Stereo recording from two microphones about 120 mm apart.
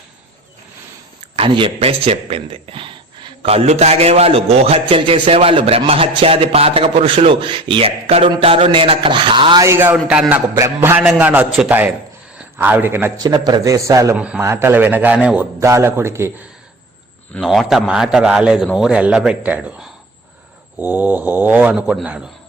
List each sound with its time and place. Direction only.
1.4 s a man's voice: 45° right (ahead or behind)
9.6 s a man's voice: 20° right (ahead or behind)
14.2 s a man's voice: 10° right (ahead or behind)
14.4 s a man's voice: 20° right (ahead or behind)
15.6 s a man's voice: 25° right (ahead or behind)
17.4 s a man's voice: centre (ahead or behind)